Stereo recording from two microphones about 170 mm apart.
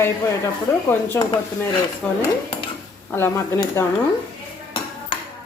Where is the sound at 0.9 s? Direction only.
15° left (ahead or behind).